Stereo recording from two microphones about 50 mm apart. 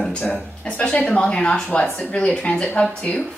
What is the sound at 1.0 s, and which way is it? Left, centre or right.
Speech, centre.